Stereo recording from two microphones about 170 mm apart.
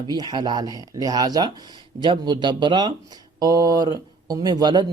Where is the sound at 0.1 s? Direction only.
25° right (ahead or behind).